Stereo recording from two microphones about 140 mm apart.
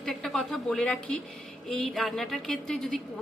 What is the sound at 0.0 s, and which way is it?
A woman's voice, 5° left (ahead or behind).